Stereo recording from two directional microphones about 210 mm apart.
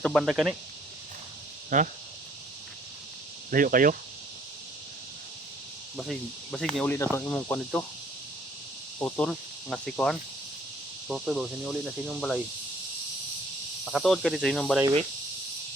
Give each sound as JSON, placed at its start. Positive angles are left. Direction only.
{"t": 0.0, "sound": "speech", "side_deg": -5}
{"t": 1.7, "sound": "speech", "side_deg": -35}
{"t": 3.5, "sound": "speech", "side_deg": -40}
{"t": 6.0, "sound": "speech", "side_deg": 0}
{"t": 9.0, "sound": "cricket", "side_deg": 5}
{"t": 11.1, "sound": "speech", "side_deg": 0}
{"t": 13.8, "sound": "speech", "side_deg": 0}